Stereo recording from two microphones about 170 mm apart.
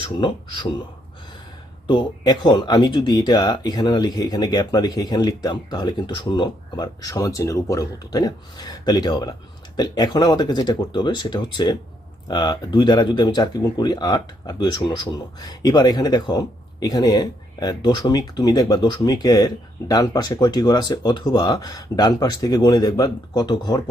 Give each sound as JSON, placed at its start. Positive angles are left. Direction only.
{"t": 0.0, "sound": "speech", "side_deg": 30}
{"t": 1.9, "sound": "speech", "side_deg": 25}